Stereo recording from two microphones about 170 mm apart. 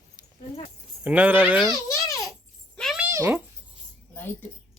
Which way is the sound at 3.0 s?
15° right (ahead or behind).